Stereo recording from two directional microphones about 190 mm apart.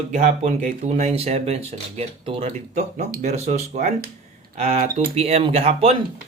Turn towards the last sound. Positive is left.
turn(degrees=-35)  # may be behind; listen again after turning